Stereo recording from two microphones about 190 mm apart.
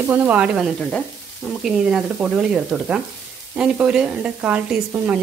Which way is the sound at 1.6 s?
5° right (ahead or behind).